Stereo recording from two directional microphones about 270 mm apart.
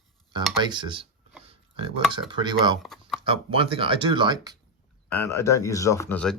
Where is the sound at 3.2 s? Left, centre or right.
Centre.